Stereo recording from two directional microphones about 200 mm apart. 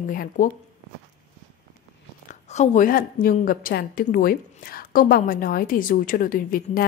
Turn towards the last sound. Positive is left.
turn(degrees=45)  # may be behind; listen again after turning